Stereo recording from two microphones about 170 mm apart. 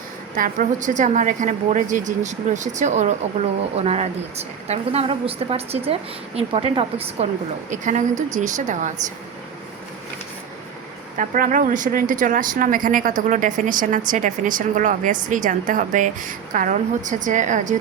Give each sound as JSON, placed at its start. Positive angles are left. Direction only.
{"t": 0.3, "sound": "a woman's voice", "side_deg": -50}
{"t": 7.7, "sound": "speech", "side_deg": -45}
{"t": 11.2, "sound": "speech", "side_deg": -50}